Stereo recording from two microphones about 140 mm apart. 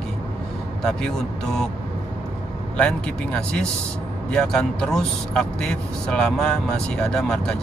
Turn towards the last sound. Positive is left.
turn(degrees=5)  # may be behind; listen again after turning